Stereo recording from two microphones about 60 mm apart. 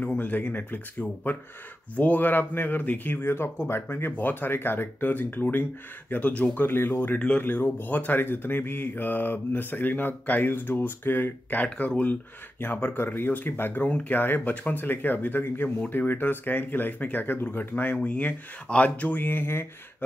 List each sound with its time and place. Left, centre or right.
0.0 s speech: left
6.7 s speech: left